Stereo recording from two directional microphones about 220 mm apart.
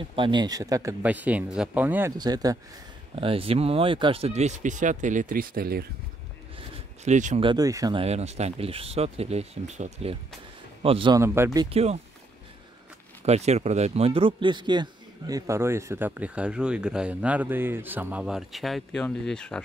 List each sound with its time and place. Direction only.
0.1 s a man's voice: 20° right (ahead or behind); by 5.9 s 45° right (ahead or behind)
7.1 s speech: 35° right (ahead or behind)
7.4 s speech: 15° right (ahead or behind)
13.2 s a man's voice: 30° right (ahead or behind); by 19.6 s 5° left (ahead or behind)